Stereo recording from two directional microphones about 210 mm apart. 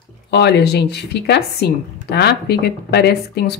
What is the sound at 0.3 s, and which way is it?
Speech, 55° left (ahead or behind).